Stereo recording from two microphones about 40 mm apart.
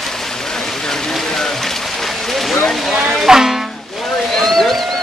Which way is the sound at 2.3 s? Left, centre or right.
Centre.